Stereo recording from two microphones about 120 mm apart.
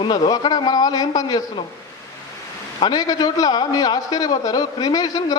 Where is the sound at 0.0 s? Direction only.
40° left (ahead or behind).